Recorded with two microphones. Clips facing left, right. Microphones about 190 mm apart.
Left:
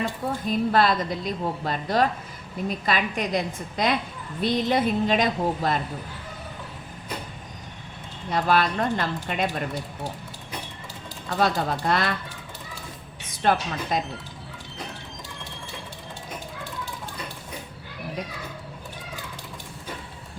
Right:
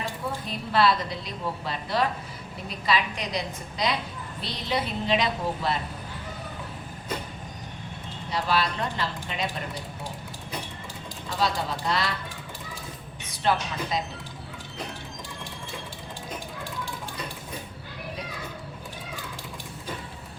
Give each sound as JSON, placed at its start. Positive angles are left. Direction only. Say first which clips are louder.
{"t": 0.4, "sound": "a woman's voice", "louder": "left 2 dB", "side_deg": 45}
{"t": 8.3, "sound": "a woman's voice", "louder": "left 4 dB", "side_deg": 50}
{"t": 11.3, "sound": "a woman's voice", "louder": "left 4 dB", "side_deg": 55}
{"t": 13.4, "sound": "a woman's voice", "louder": "left 3 dB", "side_deg": 50}